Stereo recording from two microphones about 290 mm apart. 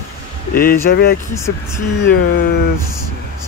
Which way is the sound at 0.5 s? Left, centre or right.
Left.